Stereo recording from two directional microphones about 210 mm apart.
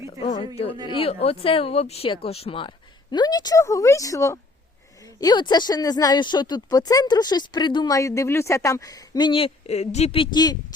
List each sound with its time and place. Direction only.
0.3 s speech: 30° left (ahead or behind)